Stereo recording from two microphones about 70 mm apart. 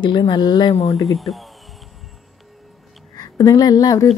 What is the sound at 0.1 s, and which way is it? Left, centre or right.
Speech, left.